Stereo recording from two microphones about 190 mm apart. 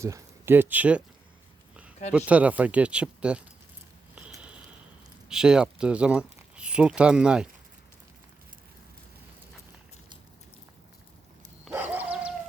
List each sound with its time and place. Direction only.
0.0 s speech: 15° right (ahead or behind)
2.1 s speech: 5° right (ahead or behind)
4.1 s a sound: 5° right (ahead or behind)
5.3 s speech: 5° right (ahead or behind)
11.6 s dog: 10° right (ahead or behind)